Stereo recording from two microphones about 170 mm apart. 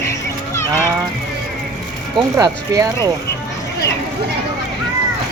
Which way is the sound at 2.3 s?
20° right (ahead or behind).